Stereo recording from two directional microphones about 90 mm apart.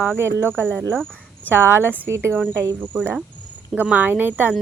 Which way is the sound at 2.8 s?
20° right (ahead or behind).